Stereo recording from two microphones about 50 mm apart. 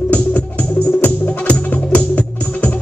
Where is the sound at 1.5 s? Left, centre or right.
Left.